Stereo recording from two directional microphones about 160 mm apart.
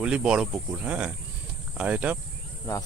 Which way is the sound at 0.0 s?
5° right (ahead or behind).